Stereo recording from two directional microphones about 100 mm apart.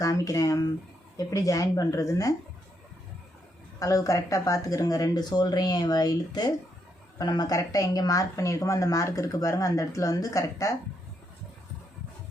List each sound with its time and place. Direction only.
0.0 s a woman's voice: 35° left (ahead or behind)
3.8 s a woman's voice: 35° left (ahead or behind)